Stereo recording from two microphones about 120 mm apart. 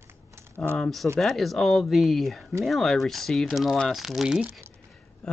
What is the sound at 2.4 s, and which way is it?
Speech, 25° right (ahead or behind).